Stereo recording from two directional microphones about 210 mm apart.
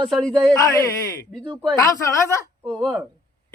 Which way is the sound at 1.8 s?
15° left (ahead or behind).